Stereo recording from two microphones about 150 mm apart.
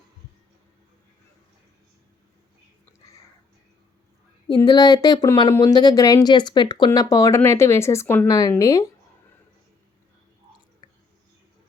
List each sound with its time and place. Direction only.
4.4 s speech: 30° left (ahead or behind)